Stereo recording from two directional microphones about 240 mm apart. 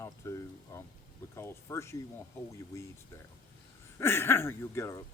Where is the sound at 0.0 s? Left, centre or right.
Centre.